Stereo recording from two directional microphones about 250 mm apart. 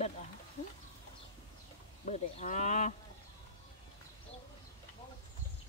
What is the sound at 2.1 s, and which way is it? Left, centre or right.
Speech, left.